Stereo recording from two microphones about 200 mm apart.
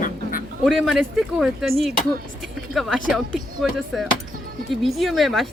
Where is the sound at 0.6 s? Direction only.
Centre (ahead or behind).